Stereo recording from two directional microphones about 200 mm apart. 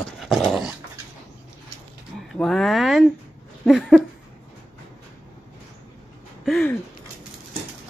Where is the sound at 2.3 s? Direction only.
Centre (ahead or behind).